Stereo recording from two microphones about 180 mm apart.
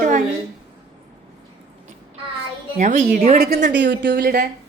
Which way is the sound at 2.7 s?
45° right (ahead or behind).